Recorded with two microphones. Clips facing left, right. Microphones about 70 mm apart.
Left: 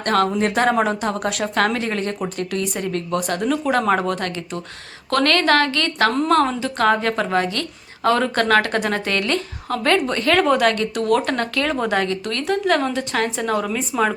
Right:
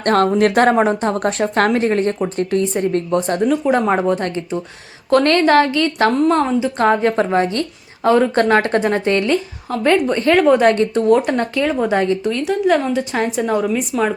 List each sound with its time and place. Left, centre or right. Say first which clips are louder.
0.0 s speech: right 4 dB; right
0.3 s speech: right 5 dB; right
0.8 s a woman's voice: right 4 dB; right
3.4 s a woman's voice: right 2 dB; centre
9.3 s speech: right 4 dB; centre
10.6 s a woman's voice: right 5 dB; right; by 11.9 s centre
11.9 s a woman's voice: right 5 dB; right
12.3 s speech: right 1 dB; centre